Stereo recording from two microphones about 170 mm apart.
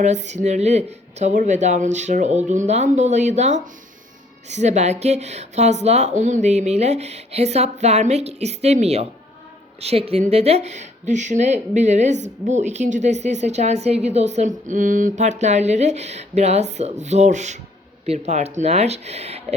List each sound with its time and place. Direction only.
0.0 s speech: 45° right (ahead or behind)